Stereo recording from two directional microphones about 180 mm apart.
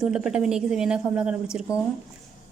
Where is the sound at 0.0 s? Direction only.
5° right (ahead or behind).